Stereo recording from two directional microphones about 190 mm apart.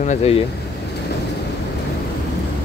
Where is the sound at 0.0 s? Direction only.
35° left (ahead or behind).